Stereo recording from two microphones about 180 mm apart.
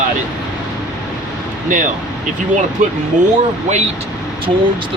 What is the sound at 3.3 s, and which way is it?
Speech, 40° right (ahead or behind).